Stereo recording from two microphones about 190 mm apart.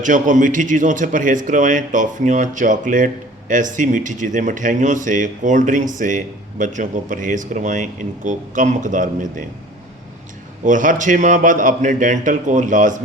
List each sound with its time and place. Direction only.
0.0 s speech: 40° right (ahead or behind)
10.6 s speech: 45° right (ahead or behind)